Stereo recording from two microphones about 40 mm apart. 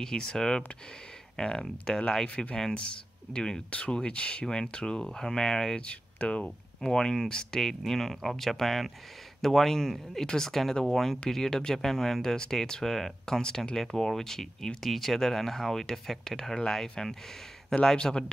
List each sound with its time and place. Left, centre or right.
0.0 s speech: centre
5.0 s speech: centre
5.8 s speech: left
6.8 s speech: centre
17.9 s speech: left